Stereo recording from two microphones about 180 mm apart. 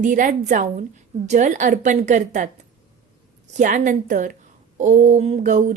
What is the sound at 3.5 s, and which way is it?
A woman's voice, 45° right (ahead or behind).